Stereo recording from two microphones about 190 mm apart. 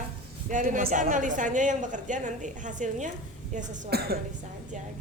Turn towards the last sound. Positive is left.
turn(degrees=-55)  # may be behind; listen again after turning